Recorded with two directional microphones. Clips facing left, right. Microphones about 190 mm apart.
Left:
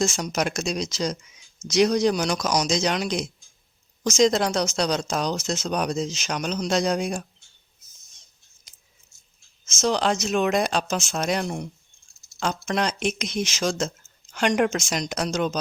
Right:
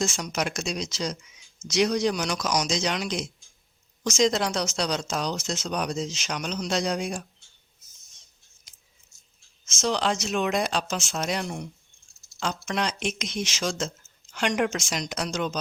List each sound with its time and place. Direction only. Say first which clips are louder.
0.0 s speech: left 3 dB; 40° left (ahead or behind)
9.6 s speech: left 3 dB; 45° left (ahead or behind)